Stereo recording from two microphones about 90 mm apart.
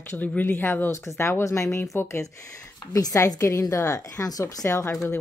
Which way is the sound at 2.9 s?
40° left (ahead or behind).